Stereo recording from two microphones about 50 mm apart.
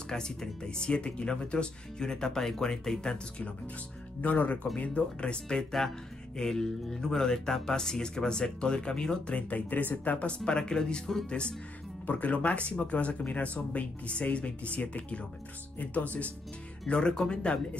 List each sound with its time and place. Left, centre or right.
0.1 s speech: centre
4.2 s speech: left
9.5 s speech: left; by 11.2 s centre
11.2 s speech: left
16.8 s speech: centre